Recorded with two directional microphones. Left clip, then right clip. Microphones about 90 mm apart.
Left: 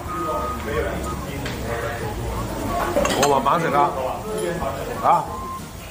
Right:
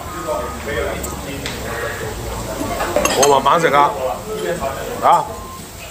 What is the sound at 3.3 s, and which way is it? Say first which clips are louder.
Chink: right 6 dB; 20° left (ahead or behind).